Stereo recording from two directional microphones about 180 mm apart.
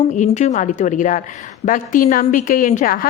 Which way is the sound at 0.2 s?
40° left (ahead or behind).